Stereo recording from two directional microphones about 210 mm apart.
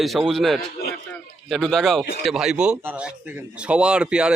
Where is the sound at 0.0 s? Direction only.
Centre (ahead or behind).